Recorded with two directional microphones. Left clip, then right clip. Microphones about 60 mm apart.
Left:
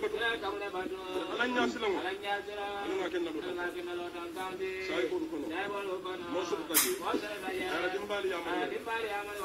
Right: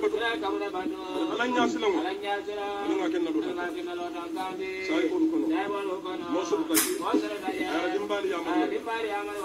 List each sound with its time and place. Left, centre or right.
0.0 s a sound: right
1.2 s a man's voice: right
4.9 s a man's voice: right
7.7 s a man's voice: right